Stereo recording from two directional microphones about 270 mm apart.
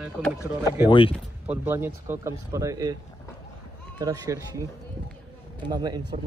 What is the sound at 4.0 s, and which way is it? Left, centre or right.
Speech, centre.